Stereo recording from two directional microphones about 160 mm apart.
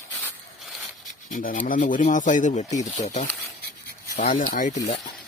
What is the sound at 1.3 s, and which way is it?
Speech, 60° left (ahead or behind).